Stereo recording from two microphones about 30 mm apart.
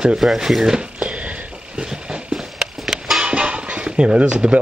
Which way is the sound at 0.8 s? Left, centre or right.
Right.